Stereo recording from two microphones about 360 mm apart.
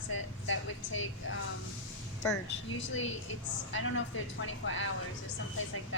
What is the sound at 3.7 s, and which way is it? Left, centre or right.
A woman's voice, left.